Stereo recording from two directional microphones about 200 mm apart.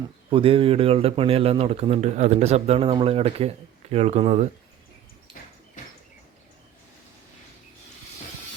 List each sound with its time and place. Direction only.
0.3 s a man's voice: 25° right (ahead or behind)